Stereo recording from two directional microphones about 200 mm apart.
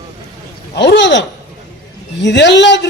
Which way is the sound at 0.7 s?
60° left (ahead or behind).